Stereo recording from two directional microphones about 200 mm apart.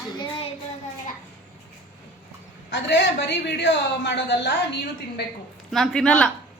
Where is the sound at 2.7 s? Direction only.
60° left (ahead or behind).